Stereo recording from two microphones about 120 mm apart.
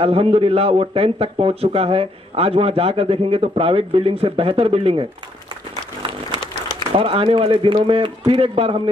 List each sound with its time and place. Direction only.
0.0 s speech: 55° right (ahead or behind)
6.9 s speech: 50° right (ahead or behind)